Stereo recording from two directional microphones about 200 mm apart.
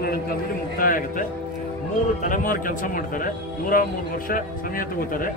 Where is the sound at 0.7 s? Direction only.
45° left (ahead or behind).